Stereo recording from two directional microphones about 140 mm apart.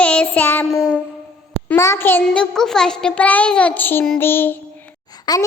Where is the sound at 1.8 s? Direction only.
20° left (ahead or behind).